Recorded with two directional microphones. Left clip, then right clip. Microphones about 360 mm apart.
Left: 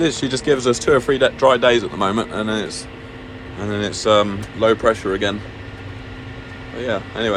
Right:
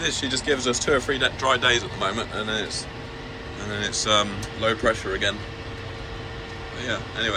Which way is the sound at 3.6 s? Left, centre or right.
Centre.